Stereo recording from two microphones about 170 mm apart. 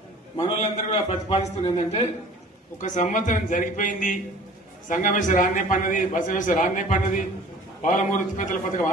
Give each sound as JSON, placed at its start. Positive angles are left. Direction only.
{"t": 0.4, "sound": "a man's voice", "side_deg": 35}
{"t": 2.8, "sound": "a man's voice", "side_deg": 50}